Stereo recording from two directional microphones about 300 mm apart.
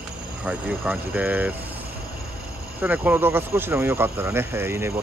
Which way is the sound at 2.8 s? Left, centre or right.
Centre.